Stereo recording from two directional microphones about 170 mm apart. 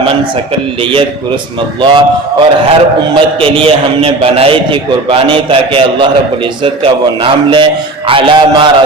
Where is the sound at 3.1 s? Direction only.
30° right (ahead or behind).